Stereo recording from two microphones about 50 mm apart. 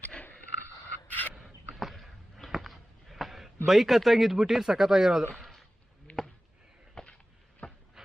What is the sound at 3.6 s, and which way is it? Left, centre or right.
Speech, centre.